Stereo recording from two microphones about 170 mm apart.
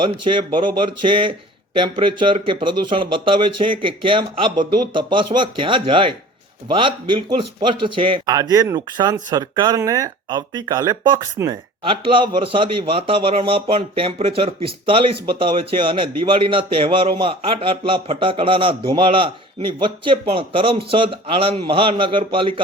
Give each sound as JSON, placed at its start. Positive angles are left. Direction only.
{"t": 0.0, "sound": "a man's voice", "side_deg": -30}